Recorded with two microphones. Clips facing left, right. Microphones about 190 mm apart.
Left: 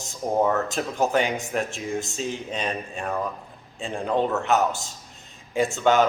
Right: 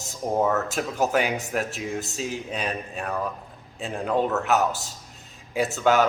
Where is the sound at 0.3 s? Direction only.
5° right (ahead or behind).